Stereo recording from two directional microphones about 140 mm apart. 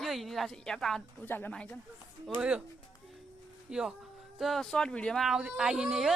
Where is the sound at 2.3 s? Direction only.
5° right (ahead or behind).